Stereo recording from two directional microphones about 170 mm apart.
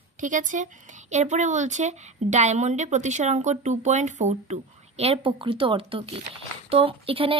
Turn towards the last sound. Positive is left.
turn(degrees=-30)  # may be behind; listen again after turning